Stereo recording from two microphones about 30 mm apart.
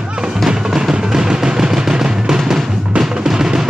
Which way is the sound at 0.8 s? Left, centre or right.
Centre.